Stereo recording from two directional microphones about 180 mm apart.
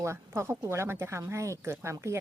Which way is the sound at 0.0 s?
15° right (ahead or behind).